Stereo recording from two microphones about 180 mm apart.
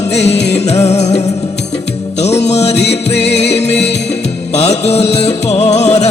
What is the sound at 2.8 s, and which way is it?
Music, 70° left (ahead or behind).